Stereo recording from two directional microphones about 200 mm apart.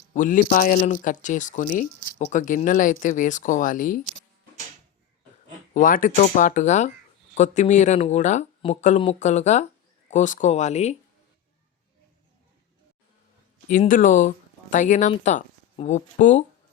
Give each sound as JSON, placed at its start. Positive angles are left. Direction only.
{"t": 0.1, "sound": "speech", "side_deg": 40}
{"t": 5.7, "sound": "speech", "side_deg": 45}
{"t": 13.7, "sound": "speech", "side_deg": 40}